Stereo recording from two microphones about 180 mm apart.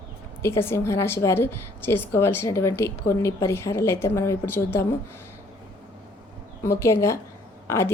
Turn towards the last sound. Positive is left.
turn(degrees=15)  # may be behind; listen again after turning